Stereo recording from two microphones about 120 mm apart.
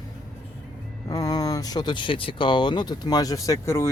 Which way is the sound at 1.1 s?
30° left (ahead or behind).